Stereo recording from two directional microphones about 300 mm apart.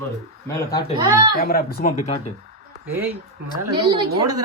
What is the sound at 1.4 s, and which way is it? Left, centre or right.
Speech, left.